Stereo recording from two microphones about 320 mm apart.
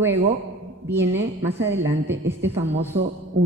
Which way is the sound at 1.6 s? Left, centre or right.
Right.